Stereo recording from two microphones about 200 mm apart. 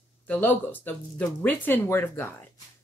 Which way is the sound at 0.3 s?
10° left (ahead or behind).